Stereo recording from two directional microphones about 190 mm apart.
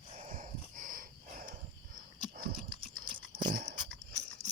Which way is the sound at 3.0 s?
25° right (ahead or behind).